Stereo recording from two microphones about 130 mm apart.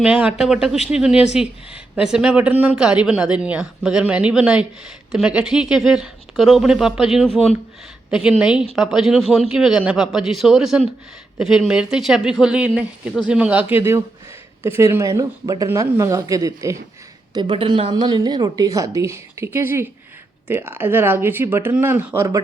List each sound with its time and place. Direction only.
0.0 s a woman's voice: 10° right (ahead or behind); by 16.7 s 25° right (ahead or behind)
17.3 s a woman's voice: 40° right (ahead or behind); by 22.4 s 20° right (ahead or behind)